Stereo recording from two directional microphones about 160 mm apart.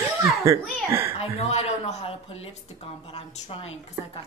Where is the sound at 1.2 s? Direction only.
40° left (ahead or behind).